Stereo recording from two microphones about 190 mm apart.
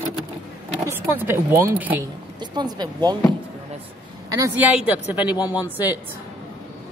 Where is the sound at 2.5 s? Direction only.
20° right (ahead or behind).